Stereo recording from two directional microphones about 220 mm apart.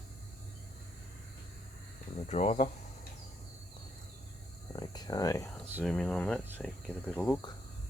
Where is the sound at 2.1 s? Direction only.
30° left (ahead or behind).